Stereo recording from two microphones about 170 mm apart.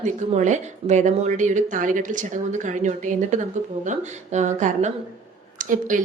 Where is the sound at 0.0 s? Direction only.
45° right (ahead or behind).